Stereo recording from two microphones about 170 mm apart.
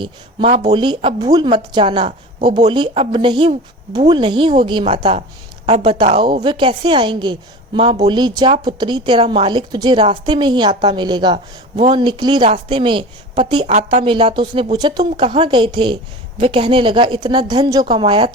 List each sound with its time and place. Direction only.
0.0 s a woman's voice: 30° right (ahead or behind)
13.7 s a woman's voice: 45° right (ahead or behind)
14.0 s a woman's voice: 30° right (ahead or behind)